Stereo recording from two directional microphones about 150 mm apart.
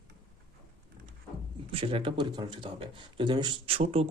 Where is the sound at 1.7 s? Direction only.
35° right (ahead or behind).